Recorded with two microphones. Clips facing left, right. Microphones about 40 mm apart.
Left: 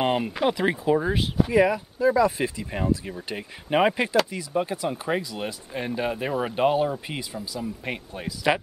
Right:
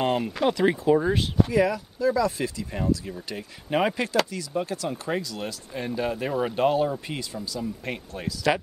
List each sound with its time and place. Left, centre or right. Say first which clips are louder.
0.0 s speech: left 1 dB; centre
1.5 s speech: left 2 dB; left